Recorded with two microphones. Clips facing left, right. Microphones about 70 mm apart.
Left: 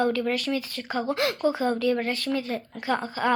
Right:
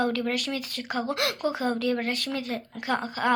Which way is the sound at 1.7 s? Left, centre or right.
Right.